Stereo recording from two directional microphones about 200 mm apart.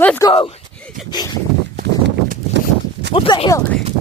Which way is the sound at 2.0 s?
60° right (ahead or behind).